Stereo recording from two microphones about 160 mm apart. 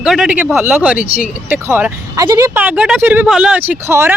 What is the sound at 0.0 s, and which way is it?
Speech, 5° right (ahead or behind).